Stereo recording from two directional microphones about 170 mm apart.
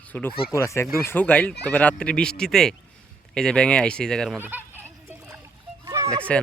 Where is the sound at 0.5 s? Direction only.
15° left (ahead or behind).